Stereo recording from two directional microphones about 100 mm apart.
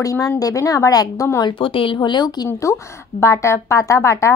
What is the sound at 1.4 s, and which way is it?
Speech, 55° left (ahead or behind).